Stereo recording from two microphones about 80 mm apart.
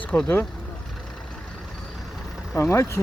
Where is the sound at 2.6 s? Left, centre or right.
Left.